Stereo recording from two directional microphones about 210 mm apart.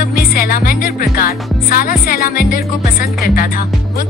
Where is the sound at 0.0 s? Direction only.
45° left (ahead or behind).